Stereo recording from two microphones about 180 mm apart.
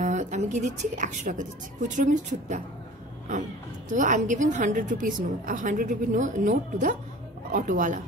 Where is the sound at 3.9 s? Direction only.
45° right (ahead or behind).